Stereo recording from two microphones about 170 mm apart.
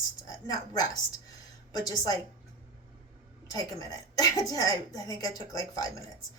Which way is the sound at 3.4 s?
20° left (ahead or behind).